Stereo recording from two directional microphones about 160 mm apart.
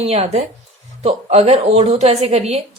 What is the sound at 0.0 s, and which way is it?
A woman's voice, 40° right (ahead or behind).